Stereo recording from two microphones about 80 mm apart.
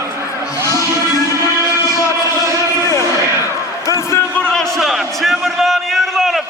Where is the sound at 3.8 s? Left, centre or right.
Left.